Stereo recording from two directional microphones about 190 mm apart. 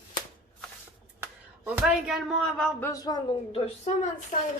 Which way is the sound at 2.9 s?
20° left (ahead or behind).